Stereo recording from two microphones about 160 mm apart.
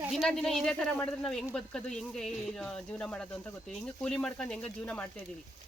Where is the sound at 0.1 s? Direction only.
Centre (ahead or behind).